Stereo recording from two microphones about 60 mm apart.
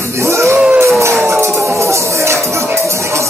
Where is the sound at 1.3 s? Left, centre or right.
Right.